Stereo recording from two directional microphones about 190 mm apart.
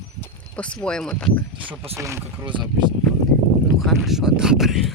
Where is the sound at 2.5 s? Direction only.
25° right (ahead or behind).